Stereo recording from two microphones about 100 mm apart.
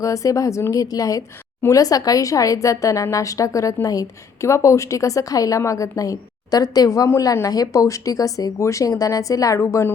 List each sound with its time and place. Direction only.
0.0 s speech: 35° left (ahead or behind)